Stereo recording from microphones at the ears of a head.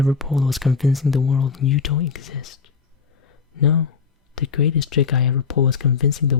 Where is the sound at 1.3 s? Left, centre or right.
Left.